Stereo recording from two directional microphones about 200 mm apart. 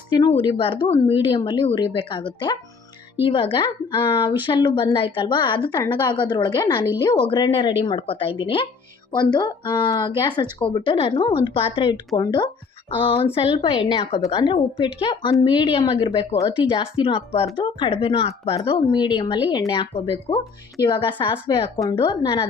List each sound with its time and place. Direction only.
0.1 s speech: 25° left (ahead or behind)